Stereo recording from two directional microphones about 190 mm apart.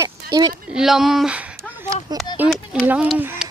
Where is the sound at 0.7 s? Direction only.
5° right (ahead or behind).